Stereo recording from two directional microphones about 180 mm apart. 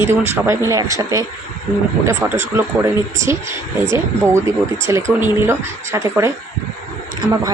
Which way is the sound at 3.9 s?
15° right (ahead or behind).